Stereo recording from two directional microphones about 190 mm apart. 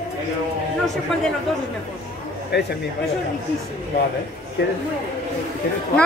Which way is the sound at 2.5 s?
60° left (ahead or behind).